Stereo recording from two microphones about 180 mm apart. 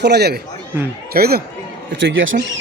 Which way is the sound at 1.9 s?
85° right.